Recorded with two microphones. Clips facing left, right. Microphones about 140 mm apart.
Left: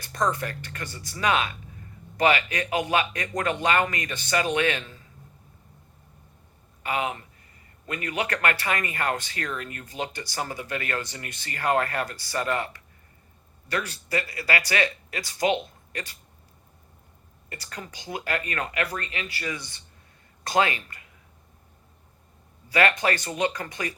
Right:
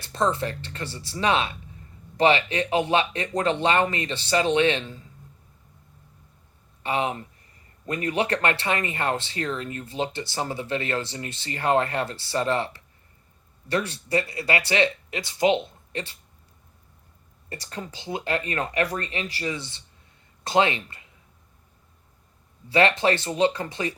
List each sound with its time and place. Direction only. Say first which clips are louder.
0.0 s speech: right 2 dB; 25° right (ahead or behind)
6.8 s speech: right 2 dB; 30° right (ahead or behind)
17.5 s speech: right 4 dB; 25° right (ahead or behind)
22.7 s speech: right 3 dB; 25° right (ahead or behind)